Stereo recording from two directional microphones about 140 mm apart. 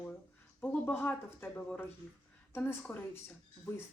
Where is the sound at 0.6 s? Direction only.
10° left (ahead or behind).